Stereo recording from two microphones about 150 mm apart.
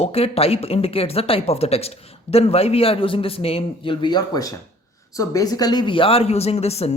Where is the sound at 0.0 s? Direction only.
40° left (ahead or behind).